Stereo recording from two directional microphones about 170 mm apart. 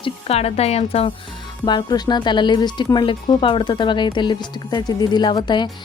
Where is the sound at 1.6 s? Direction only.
25° left (ahead or behind).